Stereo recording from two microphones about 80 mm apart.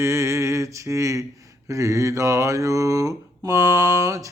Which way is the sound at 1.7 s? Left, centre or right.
Right.